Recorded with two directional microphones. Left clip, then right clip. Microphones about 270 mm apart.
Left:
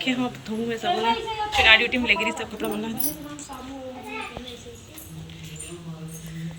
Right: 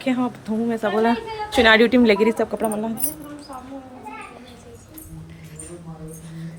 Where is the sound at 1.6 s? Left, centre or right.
Right.